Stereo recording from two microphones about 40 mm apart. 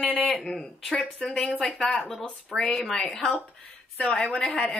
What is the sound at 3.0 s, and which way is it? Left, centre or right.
Speech, centre.